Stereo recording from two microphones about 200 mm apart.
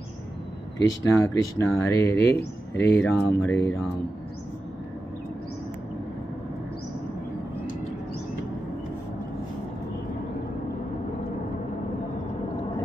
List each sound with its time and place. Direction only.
0.7 s speech: 15° left (ahead or behind)